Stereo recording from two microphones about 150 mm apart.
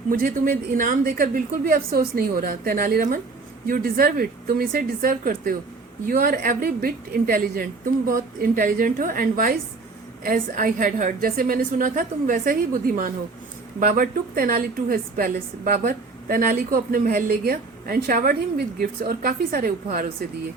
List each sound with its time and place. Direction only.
0.1 s a woman's voice: 65° right (ahead or behind)